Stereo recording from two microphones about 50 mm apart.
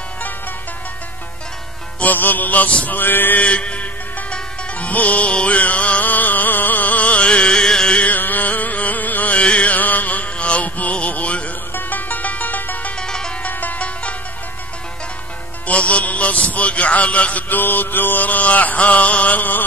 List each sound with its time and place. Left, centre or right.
2.0 s music: left
3.3 s music: left
8.1 s a sound: left
9.4 s music: left
12.9 s music: centre
13.4 s music: left
15.6 s a man's voice: left